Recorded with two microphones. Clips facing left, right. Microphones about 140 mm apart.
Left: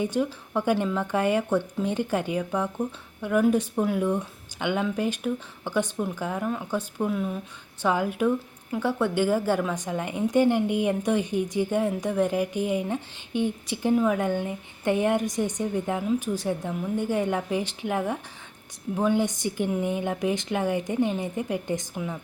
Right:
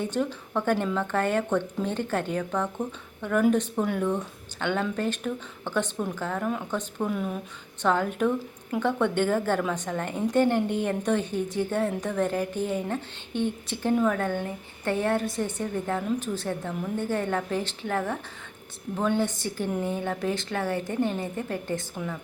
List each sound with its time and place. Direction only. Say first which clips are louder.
0.0 s a woman's voice: left 2 dB; 10° left (ahead or behind)